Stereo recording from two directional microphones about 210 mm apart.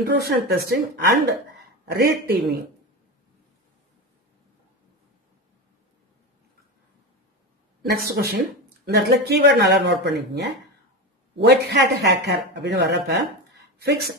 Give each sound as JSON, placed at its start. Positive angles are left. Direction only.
{"t": 0.2, "sound": "a man's voice", "side_deg": -50}
{"t": 7.8, "sound": "a man's voice", "side_deg": -50}